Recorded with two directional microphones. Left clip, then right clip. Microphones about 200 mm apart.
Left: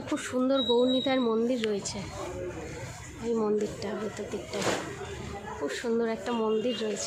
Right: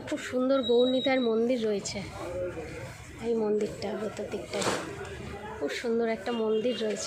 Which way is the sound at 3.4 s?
5° left (ahead or behind).